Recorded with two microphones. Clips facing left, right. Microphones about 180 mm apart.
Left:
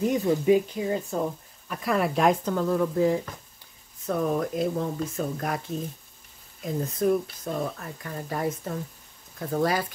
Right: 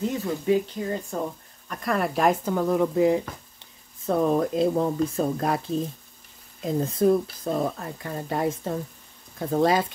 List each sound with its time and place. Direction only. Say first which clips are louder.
0.0 s a woman's voice: left 4 dB; 15° left (ahead or behind); by 2.5 s centre (ahead or behind)
2.5 s speech: right 2 dB; 20° right (ahead or behind)
4.0 s speech: right 4 dB; 30° right (ahead or behind)